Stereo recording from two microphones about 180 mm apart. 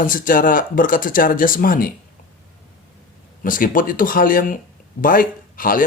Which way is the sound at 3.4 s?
50° left (ahead or behind).